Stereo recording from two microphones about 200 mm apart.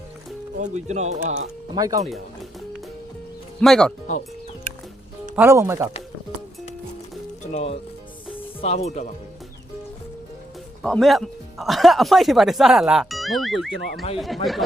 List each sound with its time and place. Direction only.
0.6 s speech: 35° right (ahead or behind)
1.7 s speech: 20° right (ahead or behind)
3.6 s speech: 5° left (ahead or behind)
5.4 s speech: 15° right (ahead or behind)
7.4 s speech: 30° left (ahead or behind)
10.8 s speech: centre (ahead or behind)